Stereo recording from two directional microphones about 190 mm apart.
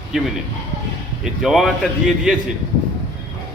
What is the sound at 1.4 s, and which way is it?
Speech, centre (ahead or behind).